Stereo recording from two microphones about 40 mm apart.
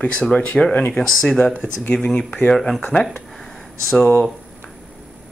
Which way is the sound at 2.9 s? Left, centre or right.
Left.